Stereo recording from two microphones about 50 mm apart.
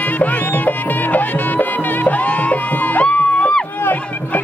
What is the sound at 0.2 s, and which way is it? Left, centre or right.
Music, left.